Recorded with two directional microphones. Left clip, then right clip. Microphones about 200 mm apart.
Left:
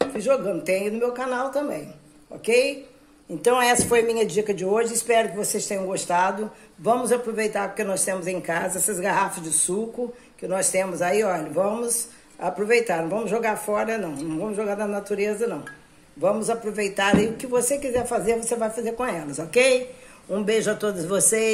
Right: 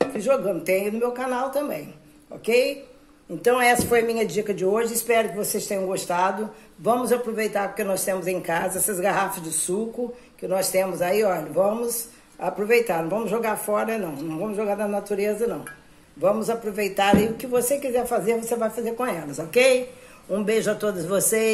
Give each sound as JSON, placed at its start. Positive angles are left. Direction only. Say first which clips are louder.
{"t": 0.1, "sound": "a man's voice", "louder": "even", "side_deg": 0}